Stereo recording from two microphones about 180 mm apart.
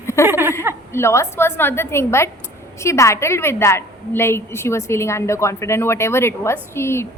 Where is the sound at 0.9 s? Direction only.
15° left (ahead or behind).